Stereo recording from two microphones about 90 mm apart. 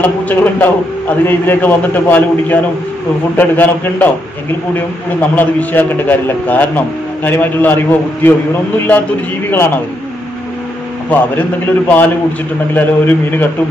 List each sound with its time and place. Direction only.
0.0 s a man's voice: 20° left (ahead or behind)
5.3 s a man's voice: 20° left (ahead or behind)
11.1 s a man's voice: 20° left (ahead or behind)